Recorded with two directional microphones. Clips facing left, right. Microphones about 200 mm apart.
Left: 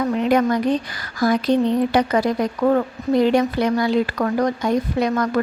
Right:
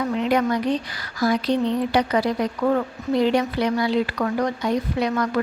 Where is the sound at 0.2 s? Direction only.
50° left (ahead or behind).